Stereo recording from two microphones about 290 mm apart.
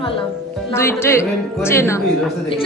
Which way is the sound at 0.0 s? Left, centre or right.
Centre.